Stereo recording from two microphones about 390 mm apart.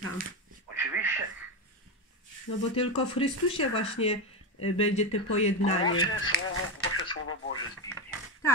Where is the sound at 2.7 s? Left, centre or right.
Centre.